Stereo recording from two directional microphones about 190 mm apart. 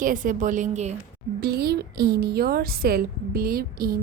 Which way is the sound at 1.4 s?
55° right (ahead or behind).